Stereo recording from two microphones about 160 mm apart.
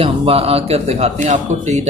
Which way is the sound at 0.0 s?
35° right (ahead or behind).